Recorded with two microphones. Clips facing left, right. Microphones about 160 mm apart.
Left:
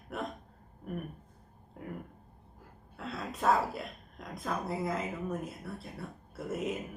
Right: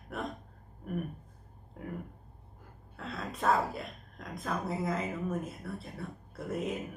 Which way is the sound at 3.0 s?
Centre (ahead or behind).